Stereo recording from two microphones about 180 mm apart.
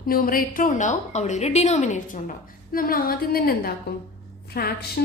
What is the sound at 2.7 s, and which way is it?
A woman's voice, 55° left (ahead or behind).